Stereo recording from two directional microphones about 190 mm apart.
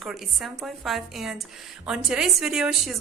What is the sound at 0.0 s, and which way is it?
A woman's voice, centre (ahead or behind).